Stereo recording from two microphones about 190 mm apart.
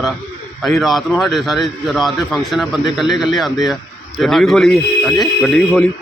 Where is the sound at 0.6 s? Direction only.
Centre (ahead or behind).